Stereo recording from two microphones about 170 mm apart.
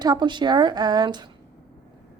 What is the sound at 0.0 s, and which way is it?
Speech, 25° right (ahead or behind).